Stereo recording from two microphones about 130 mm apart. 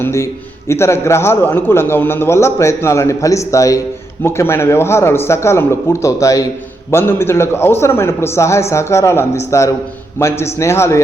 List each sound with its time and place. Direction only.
0.0 s a man's voice: 20° left (ahead or behind)